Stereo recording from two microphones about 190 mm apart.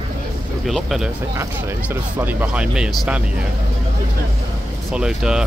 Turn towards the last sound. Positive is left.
turn(degrees=-5)  # may be behind; listen again after turning